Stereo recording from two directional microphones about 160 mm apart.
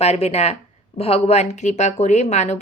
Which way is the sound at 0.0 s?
40° left (ahead or behind).